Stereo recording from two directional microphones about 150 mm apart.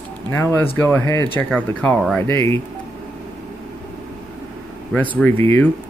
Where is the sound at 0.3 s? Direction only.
15° left (ahead or behind).